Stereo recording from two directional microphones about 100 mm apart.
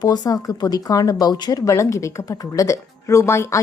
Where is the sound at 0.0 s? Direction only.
40° left (ahead or behind).